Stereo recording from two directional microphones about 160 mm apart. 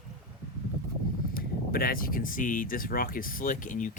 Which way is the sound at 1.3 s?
70° left (ahead or behind).